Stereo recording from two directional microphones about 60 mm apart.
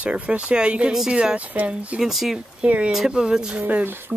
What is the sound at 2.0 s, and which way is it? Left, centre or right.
Speech, centre.